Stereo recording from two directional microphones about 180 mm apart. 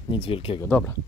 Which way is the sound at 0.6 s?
10° left (ahead or behind).